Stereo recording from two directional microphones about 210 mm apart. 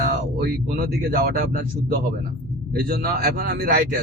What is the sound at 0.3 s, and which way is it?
Speech, 45° right (ahead or behind).